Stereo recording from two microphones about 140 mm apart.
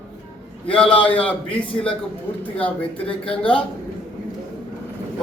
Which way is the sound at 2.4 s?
10° left (ahead or behind).